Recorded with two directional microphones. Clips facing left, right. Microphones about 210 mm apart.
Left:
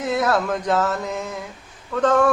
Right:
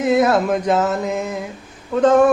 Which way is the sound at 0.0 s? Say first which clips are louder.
Right 6 dB; 20° right (ahead or behind).